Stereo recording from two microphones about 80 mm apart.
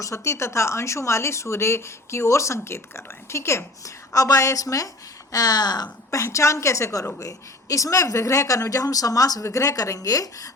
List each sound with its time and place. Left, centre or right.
0.0 s speech: left
6.1 s speech: left